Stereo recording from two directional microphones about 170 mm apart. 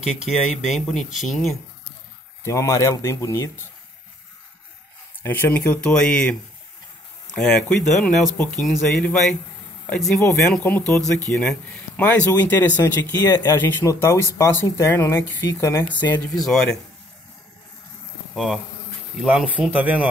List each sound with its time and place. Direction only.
0.0 s speech: centre (ahead or behind)
2.4 s speech: 15° left (ahead or behind)
5.2 s speech: 10° left (ahead or behind)
18.3 s speech: centre (ahead or behind)